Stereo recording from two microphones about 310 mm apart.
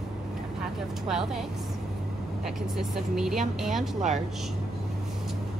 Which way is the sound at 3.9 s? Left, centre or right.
Right.